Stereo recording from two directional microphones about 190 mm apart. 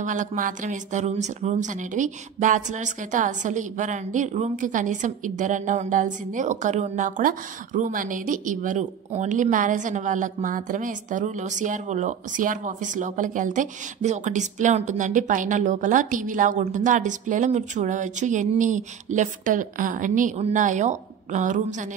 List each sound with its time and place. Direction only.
0.0 s speech: 40° right (ahead or behind)